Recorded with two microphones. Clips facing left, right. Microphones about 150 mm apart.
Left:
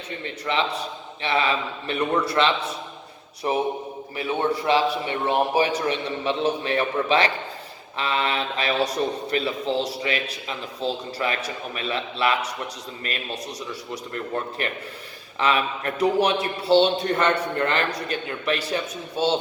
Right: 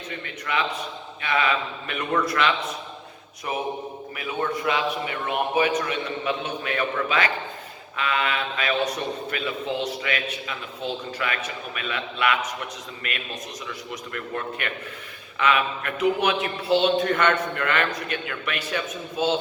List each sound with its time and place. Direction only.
0.4 s a man's voice: 30° left (ahead or behind)